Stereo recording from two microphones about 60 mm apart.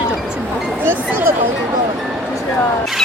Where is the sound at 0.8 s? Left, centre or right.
Right.